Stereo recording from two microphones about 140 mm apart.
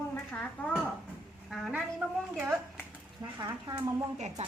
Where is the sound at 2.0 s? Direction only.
10° right (ahead or behind).